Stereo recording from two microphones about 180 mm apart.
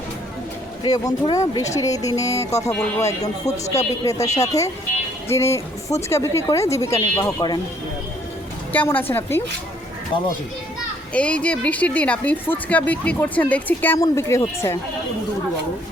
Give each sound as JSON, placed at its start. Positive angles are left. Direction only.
{"t": 0.9, "sound": "speech", "side_deg": 20}
{"t": 8.7, "sound": "speech", "side_deg": 10}
{"t": 11.1, "sound": "speech", "side_deg": 5}